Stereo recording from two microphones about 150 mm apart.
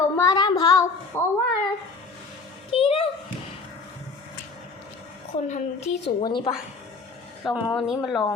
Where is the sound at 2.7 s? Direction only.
40° left (ahead or behind).